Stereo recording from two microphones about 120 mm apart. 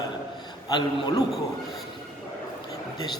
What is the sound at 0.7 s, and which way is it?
Speech, 35° left (ahead or behind).